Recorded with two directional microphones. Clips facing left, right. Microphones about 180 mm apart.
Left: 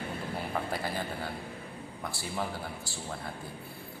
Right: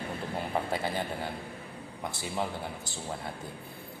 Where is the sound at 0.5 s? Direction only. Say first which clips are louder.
Right 3 dB; 20° right (ahead or behind).